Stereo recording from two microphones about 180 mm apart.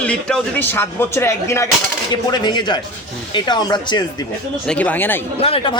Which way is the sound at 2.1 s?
25° left (ahead or behind).